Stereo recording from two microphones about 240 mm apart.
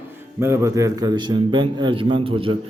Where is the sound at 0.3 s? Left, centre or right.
Centre.